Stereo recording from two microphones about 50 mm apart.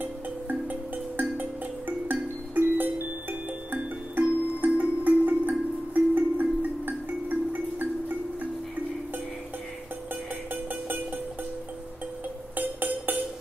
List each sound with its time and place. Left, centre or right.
0.0 s music: right
12.5 s music: right